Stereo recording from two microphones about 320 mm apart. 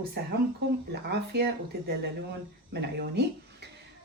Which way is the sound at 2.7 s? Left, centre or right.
Right.